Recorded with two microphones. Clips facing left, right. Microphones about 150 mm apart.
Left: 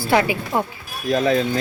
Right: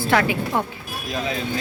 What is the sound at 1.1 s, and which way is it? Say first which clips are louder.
Speech: left 9 dB; 50° left (ahead or behind).